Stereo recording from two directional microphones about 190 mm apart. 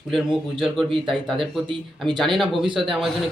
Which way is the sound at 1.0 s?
Centre (ahead or behind).